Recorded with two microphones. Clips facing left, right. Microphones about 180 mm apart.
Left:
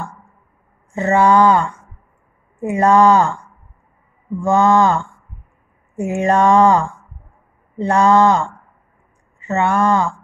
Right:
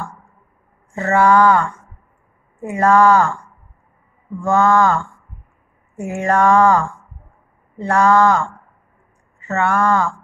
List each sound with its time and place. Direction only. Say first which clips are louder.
0.9 s mantra: left 1 dB; 20° left (ahead or behind)
4.4 s mantra: left 1 dB; 20° left (ahead or behind)